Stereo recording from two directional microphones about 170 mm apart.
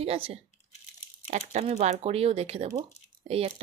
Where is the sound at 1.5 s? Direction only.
40° right (ahead or behind).